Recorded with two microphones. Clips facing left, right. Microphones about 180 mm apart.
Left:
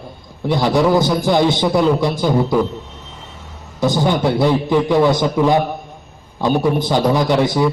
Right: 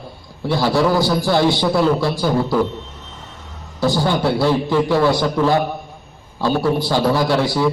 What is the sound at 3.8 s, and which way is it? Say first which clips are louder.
A man's voice: left 1 dB; 20° left (ahead or behind).